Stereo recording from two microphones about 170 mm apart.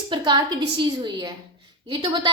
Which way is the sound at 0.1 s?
25° right (ahead or behind).